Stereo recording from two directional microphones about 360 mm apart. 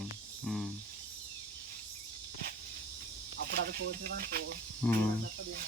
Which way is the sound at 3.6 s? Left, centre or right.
Right.